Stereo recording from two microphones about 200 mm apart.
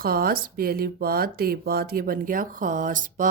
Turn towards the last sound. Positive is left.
turn(degrees=-40)  # may be behind; listen again after turning